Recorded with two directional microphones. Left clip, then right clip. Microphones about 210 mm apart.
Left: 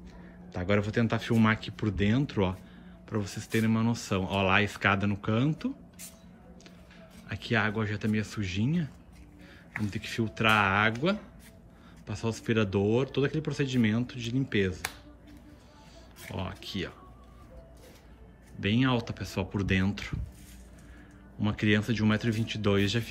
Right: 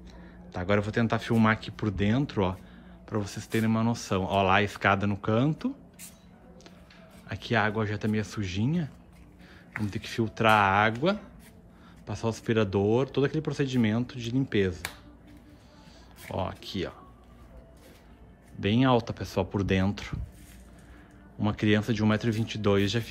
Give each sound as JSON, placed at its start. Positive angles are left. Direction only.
{"t": 0.0, "sound": "speech", "side_deg": 0}
{"t": 7.2, "sound": "speech", "side_deg": -5}
{"t": 16.2, "sound": "speech", "side_deg": -5}
{"t": 18.6, "sound": "speech", "side_deg": -10}
{"t": 21.4, "sound": "speech", "side_deg": -5}